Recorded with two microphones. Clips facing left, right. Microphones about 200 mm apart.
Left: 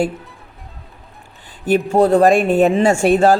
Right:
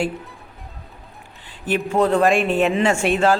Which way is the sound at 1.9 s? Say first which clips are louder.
Left 4 dB; 40° left (ahead or behind).